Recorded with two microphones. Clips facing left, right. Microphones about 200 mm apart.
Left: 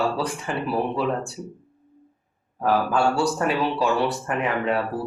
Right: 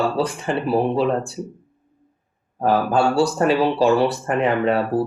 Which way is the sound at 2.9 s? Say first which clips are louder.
Right 4 dB; 30° right (ahead or behind).